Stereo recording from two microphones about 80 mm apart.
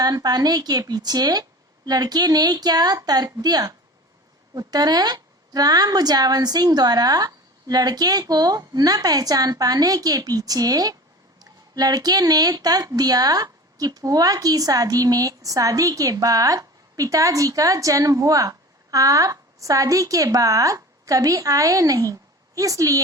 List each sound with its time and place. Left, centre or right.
0.0 s speech: right